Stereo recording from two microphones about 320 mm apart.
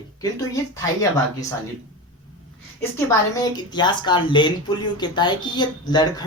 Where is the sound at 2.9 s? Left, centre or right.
Centre.